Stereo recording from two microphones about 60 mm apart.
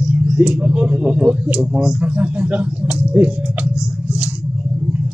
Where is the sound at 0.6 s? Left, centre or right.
Right.